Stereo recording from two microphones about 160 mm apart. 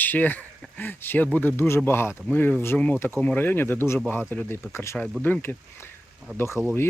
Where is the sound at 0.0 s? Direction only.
10° left (ahead or behind).